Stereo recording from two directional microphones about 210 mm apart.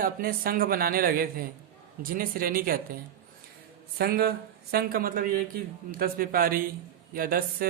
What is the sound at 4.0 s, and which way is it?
Speech, 50° right (ahead or behind).